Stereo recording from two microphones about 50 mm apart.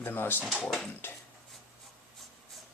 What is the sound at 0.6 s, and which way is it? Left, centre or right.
Speech, centre.